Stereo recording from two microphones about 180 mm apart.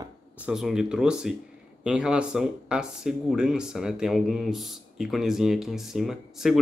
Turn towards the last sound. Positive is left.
turn(degrees=0)  # may be behind; listen again after turning